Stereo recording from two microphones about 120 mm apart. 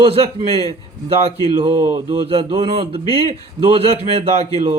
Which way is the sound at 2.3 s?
55° right (ahead or behind).